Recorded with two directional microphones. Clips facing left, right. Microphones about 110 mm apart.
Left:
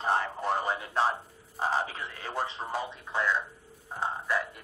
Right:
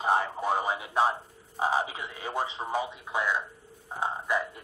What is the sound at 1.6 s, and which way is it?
A man's voice, 10° right (ahead or behind).